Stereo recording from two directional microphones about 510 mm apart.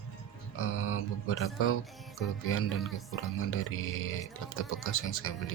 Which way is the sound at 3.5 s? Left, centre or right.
Left.